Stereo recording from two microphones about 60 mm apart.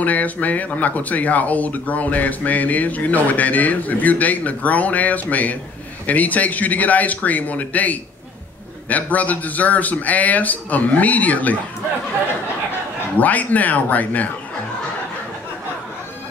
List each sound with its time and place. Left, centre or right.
0.0 s speech: left
13.2 s speech: left